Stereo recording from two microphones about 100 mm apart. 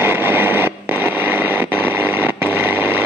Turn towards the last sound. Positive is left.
turn(degrees=-20)  # may be behind; listen again after turning